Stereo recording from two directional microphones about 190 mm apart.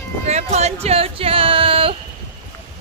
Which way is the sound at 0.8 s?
30° right (ahead or behind).